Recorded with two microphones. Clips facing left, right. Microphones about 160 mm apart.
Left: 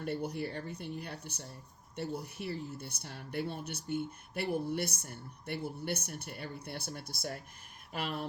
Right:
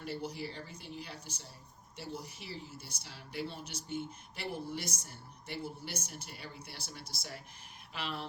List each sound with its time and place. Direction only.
0.0 s speech: 55° left (ahead or behind)